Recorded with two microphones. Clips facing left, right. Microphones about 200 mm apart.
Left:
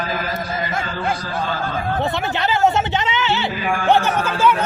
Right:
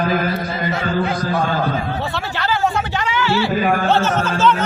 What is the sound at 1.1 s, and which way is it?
Speech, 50° right (ahead or behind).